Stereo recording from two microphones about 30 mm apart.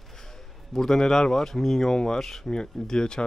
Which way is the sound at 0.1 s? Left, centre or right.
Centre.